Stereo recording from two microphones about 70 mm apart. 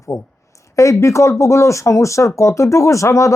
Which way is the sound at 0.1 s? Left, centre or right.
Left.